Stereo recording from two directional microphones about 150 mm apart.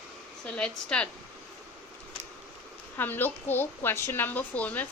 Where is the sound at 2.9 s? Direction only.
15° left (ahead or behind).